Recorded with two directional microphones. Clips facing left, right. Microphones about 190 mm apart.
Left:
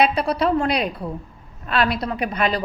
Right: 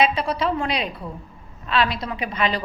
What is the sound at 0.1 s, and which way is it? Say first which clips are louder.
A woman's voice: left 3 dB; 40° left (ahead or behind).